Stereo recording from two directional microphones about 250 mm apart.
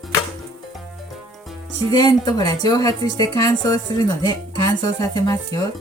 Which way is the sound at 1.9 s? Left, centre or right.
Centre.